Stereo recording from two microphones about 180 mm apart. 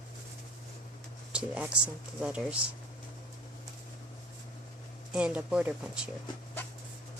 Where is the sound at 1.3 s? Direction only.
5° right (ahead or behind).